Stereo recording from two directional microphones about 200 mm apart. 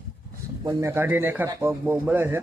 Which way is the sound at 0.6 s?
20° right (ahead or behind).